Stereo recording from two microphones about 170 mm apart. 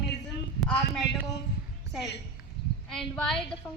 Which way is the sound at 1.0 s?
90° left.